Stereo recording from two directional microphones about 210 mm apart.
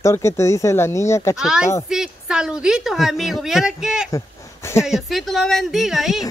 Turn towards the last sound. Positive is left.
turn(degrees=0)  # may be behind; listen again after turning